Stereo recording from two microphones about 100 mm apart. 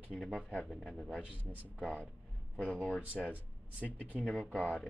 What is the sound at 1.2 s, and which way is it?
Speech, 15° right (ahead or behind).